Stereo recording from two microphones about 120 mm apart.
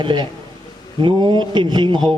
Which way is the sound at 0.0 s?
40° right (ahead or behind).